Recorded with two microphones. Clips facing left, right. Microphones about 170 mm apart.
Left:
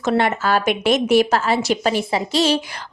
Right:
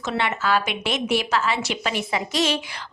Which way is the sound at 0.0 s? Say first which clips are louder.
Left 6 dB; 45° left (ahead or behind).